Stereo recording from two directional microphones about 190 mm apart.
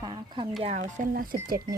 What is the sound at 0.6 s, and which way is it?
Speech, 40° right (ahead or behind).